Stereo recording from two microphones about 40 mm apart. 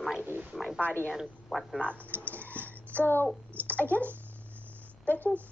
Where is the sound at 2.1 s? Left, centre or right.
Right.